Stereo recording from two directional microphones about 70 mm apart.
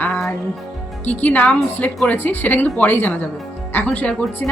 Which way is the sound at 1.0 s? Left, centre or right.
Left.